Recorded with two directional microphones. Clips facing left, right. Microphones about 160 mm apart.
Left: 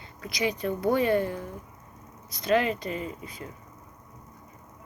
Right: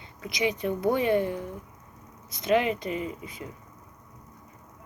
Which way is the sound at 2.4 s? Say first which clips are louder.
Even; 20° right (ahead or behind).